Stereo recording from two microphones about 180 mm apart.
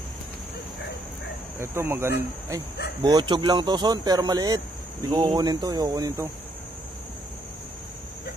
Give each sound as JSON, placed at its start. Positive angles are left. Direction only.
{"t": 1.6, "sound": "speech", "side_deg": -15}
{"t": 3.0, "sound": "speech", "side_deg": -25}